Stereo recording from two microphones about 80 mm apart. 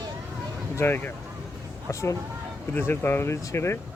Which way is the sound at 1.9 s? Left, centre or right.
Left.